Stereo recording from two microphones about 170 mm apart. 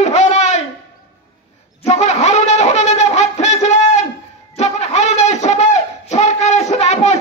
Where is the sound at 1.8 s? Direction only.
40° left (ahead or behind).